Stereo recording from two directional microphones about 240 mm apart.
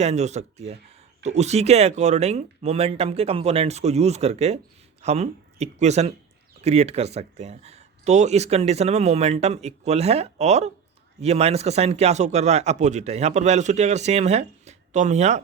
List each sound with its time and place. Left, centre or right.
0.0 s speech: right